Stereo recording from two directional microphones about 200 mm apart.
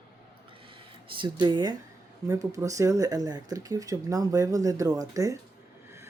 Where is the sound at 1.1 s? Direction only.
25° right (ahead or behind).